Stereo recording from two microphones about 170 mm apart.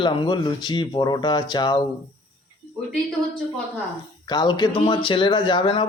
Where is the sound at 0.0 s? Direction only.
30° left (ahead or behind).